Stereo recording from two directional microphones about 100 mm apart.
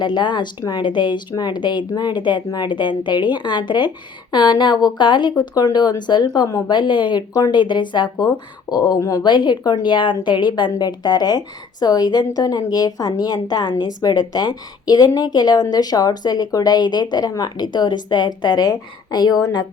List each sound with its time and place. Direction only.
0.0 s a woman's voice: 50° left (ahead or behind)
6.7 s a woman's voice: 50° left (ahead or behind); by 9.2 s 35° left (ahead or behind)
9.2 s a woman's voice: 45° left (ahead or behind)